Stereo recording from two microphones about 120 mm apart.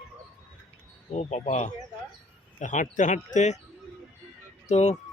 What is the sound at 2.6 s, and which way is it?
Speech, 90° left.